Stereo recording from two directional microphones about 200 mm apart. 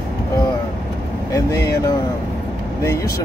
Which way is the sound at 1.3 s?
15° left (ahead or behind).